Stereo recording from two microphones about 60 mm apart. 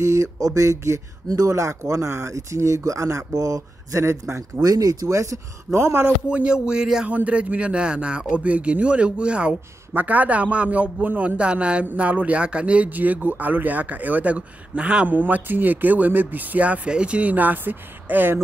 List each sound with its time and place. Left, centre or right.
0.0 s speech: right
4.6 s speech: right
6.2 s a man's voice: centre
15.0 s a man's voice: right